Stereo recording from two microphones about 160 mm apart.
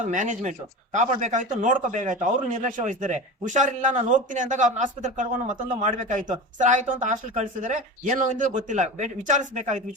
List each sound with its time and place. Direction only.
0.0 s speech: 50° right (ahead or behind)